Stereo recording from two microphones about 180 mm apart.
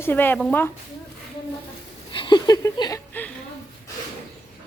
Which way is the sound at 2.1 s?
25° left (ahead or behind).